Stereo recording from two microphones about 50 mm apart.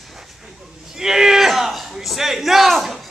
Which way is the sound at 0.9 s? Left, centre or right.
Centre.